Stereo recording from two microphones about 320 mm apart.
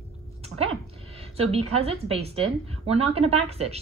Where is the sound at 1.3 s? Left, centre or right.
Centre.